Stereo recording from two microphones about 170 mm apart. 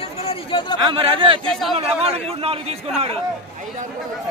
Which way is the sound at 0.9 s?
30° right (ahead or behind).